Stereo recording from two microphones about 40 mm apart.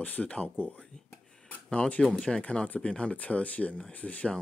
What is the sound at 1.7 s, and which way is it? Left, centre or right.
Speech, left.